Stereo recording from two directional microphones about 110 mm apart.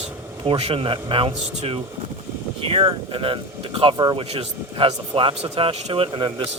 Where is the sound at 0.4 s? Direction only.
55° right (ahead or behind).